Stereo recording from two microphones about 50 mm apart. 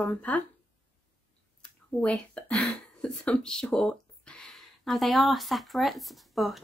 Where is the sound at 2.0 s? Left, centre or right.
Left.